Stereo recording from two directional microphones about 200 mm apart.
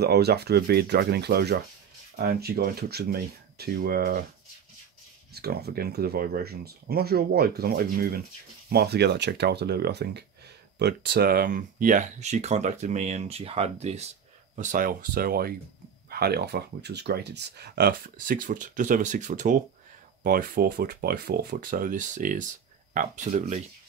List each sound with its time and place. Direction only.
0.0 s speech: 55° right (ahead or behind)
5.3 s speech: 50° right (ahead or behind); by 23.6 s 35° right (ahead or behind)